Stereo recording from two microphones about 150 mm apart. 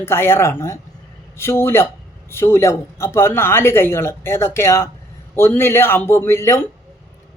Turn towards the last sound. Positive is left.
turn(degrees=20)  # may be behind; listen again after turning